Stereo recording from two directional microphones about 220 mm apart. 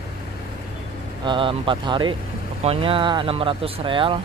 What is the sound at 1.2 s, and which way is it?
Speech, 20° right (ahead or behind).